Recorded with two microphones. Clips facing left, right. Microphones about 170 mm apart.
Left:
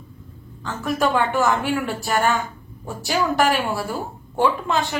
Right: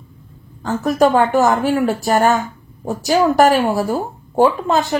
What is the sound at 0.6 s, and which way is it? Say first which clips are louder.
A woman's voice: right 8 dB; 40° right (ahead or behind).